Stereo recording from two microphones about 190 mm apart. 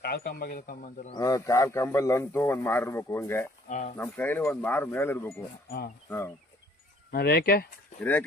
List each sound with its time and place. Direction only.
0.0 s speech: 55° left (ahead or behind)
1.1 s speech: 20° left (ahead or behind)
3.7 s speech: 40° left (ahead or behind)
3.9 s speech: 10° left (ahead or behind)
5.6 s speech: 50° left (ahead or behind)
6.1 s speech: 10° left (ahead or behind)
7.1 s speech: 55° left (ahead or behind)